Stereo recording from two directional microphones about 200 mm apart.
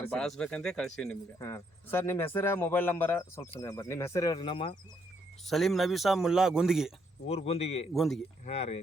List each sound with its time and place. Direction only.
0.0 s a man's voice: 5° left (ahead or behind)
1.4 s speech: 15° left (ahead or behind)
5.5 s a man's voice: centre (ahead or behind)
7.3 s a man's voice: 30° left (ahead or behind)
7.9 s a man's voice: centre (ahead or behind)
8.4 s a man's voice: 30° left (ahead or behind)